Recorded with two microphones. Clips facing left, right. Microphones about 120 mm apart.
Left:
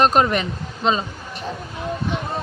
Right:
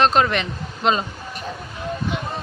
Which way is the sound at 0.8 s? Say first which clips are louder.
Even; centre (ahead or behind).